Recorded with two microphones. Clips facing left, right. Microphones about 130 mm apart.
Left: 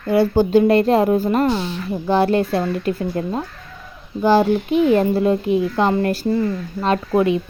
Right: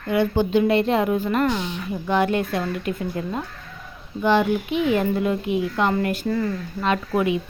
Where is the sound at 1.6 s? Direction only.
15° right (ahead or behind).